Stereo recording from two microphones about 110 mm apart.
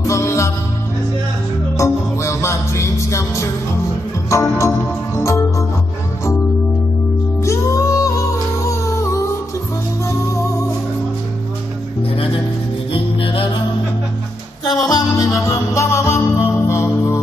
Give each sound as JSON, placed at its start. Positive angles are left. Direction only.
{"t": 0.0, "sound": "music", "side_deg": 25}
{"t": 1.8, "sound": "music", "side_deg": 25}
{"t": 7.4, "sound": "music", "side_deg": 25}
{"t": 12.9, "sound": "music", "side_deg": 55}
{"t": 14.9, "sound": "music", "side_deg": 30}